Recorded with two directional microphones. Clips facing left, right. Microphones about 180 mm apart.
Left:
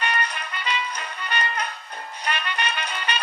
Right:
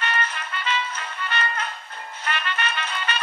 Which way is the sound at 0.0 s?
15° left (ahead or behind).